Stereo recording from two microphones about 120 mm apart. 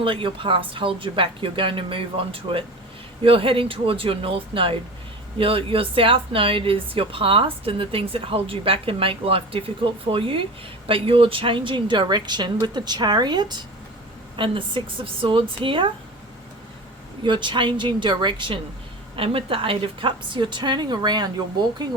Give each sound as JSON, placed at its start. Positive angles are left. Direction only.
{"t": 0.0, "sound": "a woman's voice", "side_deg": -45}
{"t": 17.2, "sound": "a woman's voice", "side_deg": -40}